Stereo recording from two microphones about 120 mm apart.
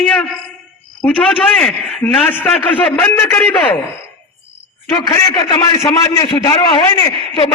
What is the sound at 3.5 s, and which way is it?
Speech, 40° left (ahead or behind).